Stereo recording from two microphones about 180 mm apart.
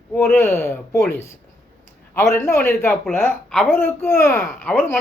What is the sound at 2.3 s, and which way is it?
A man's voice, 15° left (ahead or behind).